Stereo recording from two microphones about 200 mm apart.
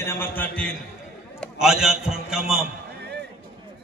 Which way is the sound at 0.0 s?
10° left (ahead or behind).